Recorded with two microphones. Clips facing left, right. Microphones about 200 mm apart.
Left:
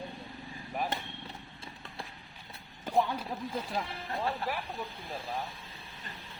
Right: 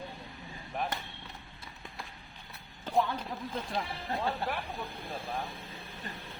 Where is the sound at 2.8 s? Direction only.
10° left (ahead or behind).